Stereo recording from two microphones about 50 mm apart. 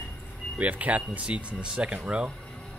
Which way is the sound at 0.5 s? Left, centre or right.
Right.